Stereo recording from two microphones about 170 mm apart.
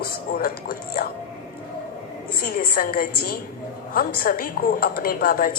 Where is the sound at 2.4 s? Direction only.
60° left (ahead or behind).